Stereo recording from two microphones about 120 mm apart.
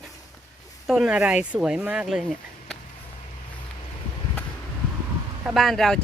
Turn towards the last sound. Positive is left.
turn(degrees=5)  # may be behind; listen again after turning